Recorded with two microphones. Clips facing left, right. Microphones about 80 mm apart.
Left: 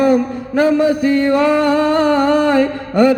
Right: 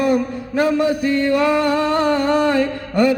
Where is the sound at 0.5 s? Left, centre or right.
Left.